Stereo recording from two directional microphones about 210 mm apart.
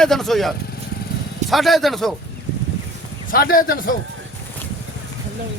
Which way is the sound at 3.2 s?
45° left (ahead or behind).